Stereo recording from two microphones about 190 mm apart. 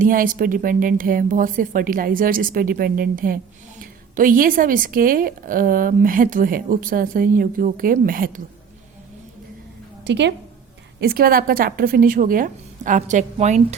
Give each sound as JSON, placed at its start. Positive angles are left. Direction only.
{"t": 0.0, "sound": "a woman's voice", "side_deg": -45}
{"t": 10.0, "sound": "a woman's voice", "side_deg": -65}
{"t": 11.0, "sound": "a woman's voice", "side_deg": -50}